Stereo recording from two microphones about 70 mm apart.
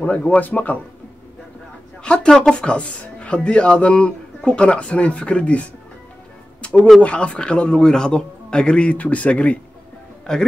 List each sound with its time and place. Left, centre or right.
0.0 s speech: centre
2.0 s speech: centre
6.6 s speech: centre